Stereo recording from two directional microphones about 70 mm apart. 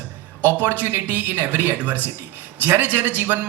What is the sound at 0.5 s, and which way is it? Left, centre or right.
Speech, right.